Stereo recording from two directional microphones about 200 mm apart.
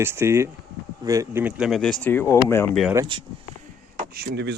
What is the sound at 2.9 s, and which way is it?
Speech, 20° right (ahead or behind).